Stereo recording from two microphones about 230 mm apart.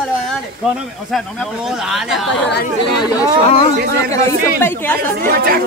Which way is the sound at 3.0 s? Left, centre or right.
Centre.